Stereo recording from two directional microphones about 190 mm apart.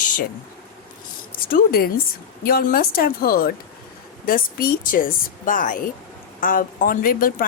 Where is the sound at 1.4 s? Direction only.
50° left (ahead or behind).